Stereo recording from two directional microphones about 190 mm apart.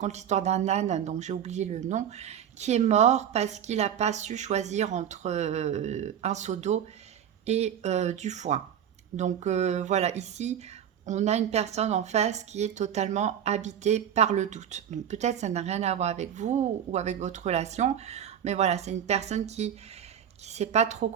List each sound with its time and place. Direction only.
0.0 s a woman's voice: 35° right (ahead or behind)